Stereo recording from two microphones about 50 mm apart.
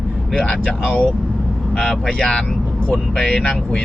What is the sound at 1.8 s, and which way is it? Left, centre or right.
Speech, centre.